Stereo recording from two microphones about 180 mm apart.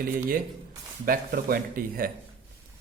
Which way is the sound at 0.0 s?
50° right (ahead or behind).